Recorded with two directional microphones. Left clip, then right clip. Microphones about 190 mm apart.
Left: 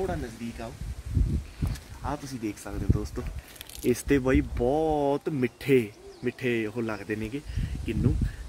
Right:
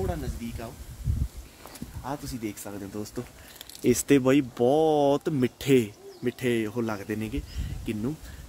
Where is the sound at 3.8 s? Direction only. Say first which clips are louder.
Right 3 dB; 65° right (ahead or behind).